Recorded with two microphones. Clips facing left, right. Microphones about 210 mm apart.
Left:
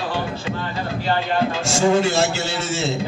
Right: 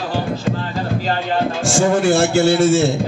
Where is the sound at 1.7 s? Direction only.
50° right (ahead or behind).